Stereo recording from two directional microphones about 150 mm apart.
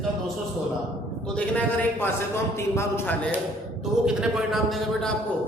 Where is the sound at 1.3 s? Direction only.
10° left (ahead or behind).